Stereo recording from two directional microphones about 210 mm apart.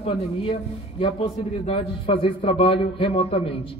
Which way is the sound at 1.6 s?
25° left (ahead or behind).